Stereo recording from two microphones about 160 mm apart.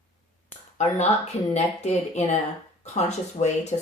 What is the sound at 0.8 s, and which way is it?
Speech, 45° left (ahead or behind).